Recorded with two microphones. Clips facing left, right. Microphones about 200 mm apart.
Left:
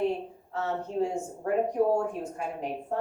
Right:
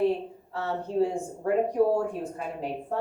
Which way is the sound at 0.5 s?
35° right (ahead or behind).